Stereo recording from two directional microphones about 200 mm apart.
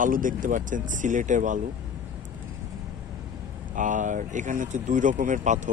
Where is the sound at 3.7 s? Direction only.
40° right (ahead or behind).